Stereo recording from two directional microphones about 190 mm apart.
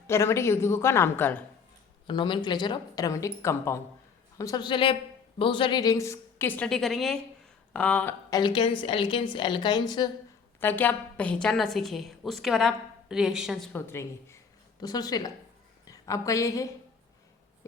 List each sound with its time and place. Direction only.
0.1 s a woman's voice: 15° left (ahead or behind)
2.0 s a woman's voice: 25° left (ahead or behind); by 8.1 s 5° left (ahead or behind)
8.3 s speech: 25° left (ahead or behind)
10.6 s a woman's voice: 10° left (ahead or behind)
13.7 s a woman's voice: 15° left (ahead or behind)